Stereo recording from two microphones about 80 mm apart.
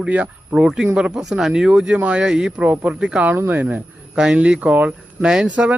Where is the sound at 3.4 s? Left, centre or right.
Right.